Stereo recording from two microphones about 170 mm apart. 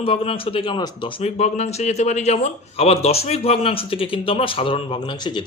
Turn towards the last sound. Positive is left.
turn(degrees=25)  # may be behind; listen again after turning